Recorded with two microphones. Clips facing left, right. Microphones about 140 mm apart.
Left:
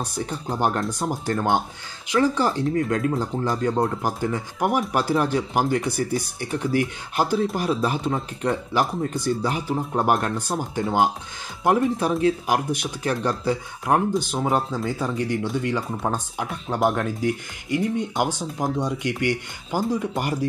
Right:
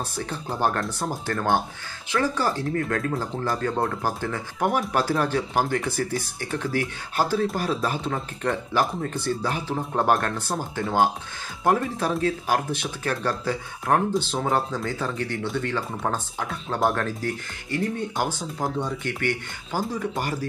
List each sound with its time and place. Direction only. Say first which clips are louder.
0.0 s speech: left 2 dB; 15° left (ahead or behind)